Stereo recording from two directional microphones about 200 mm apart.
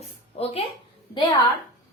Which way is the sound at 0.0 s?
30° left (ahead or behind).